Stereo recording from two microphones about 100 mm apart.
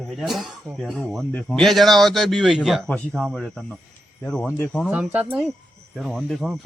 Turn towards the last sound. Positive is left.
turn(degrees=0)  # may be behind; listen again after turning